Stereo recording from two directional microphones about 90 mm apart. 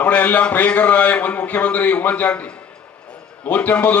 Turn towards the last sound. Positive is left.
turn(degrees=20)  # may be behind; listen again after turning